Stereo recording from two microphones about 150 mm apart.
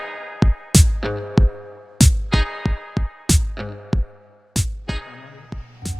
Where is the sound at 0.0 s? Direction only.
Centre (ahead or behind).